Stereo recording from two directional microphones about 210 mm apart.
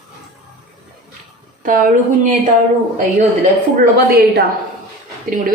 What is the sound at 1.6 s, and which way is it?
Speech, 40° right (ahead or behind).